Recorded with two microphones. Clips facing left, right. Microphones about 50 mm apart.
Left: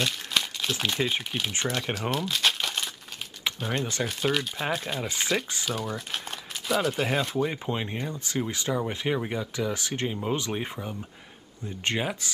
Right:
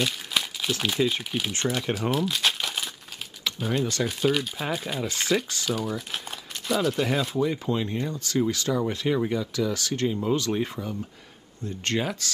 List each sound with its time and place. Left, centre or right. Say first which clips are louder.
0.0 s speech: right 1 dB; centre
2.0 s crumpling: right 2 dB; centre
3.5 s speech: right 4 dB; centre
5.0 s speech: right 1 dB; centre
5.7 s speech: right 4 dB; centre
7.4 s speech: right 3 dB; left